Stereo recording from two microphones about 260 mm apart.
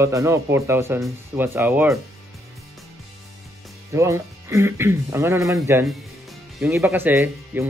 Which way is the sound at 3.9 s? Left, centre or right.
Centre.